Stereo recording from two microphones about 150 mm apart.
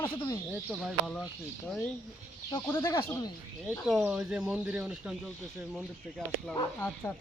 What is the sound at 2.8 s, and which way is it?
Speech, 30° left (ahead or behind).